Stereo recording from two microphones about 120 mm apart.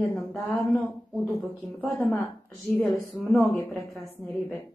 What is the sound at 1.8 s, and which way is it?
Speech, 15° left (ahead or behind).